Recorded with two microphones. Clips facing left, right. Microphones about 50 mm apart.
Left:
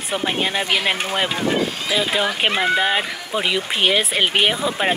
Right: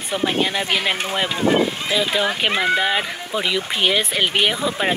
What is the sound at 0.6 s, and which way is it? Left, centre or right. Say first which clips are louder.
Speech: left 1 dB; left.